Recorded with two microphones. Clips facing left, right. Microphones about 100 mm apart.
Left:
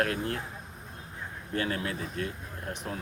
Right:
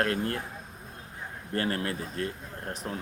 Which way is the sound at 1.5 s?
50° right (ahead or behind).